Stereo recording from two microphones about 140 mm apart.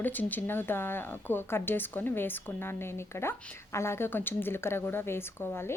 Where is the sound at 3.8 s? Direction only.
20° left (ahead or behind).